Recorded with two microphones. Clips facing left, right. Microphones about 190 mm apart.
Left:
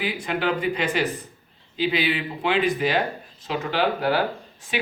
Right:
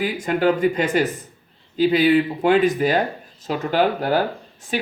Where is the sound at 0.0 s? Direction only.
45° right (ahead or behind).